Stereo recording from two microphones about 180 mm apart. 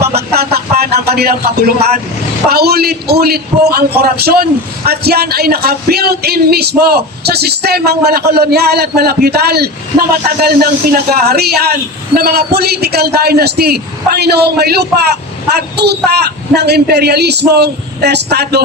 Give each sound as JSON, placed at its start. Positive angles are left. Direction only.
{"t": 0.0, "sound": "a man's voice", "side_deg": -65}